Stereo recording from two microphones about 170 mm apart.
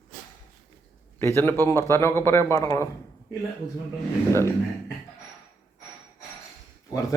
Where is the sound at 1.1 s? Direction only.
15° left (ahead or behind).